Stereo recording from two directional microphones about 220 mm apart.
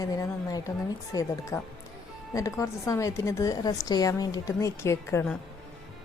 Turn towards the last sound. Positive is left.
turn(degrees=10)  # may be behind; listen again after turning